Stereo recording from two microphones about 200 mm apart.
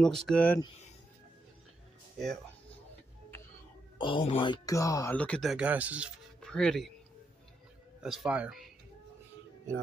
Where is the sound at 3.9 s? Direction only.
25° left (ahead or behind); by 6.9 s centre (ahead or behind).